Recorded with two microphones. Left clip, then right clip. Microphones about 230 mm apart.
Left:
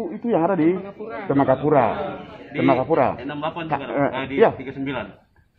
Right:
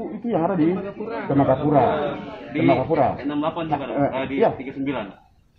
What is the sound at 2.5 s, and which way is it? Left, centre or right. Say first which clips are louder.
A man's voice: left 1 dB; left.